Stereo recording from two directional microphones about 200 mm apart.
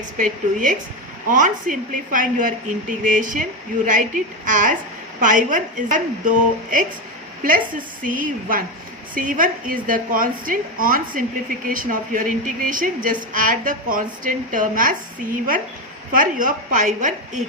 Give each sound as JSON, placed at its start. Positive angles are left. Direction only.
{"t": 0.2, "sound": "a woman's voice", "side_deg": -40}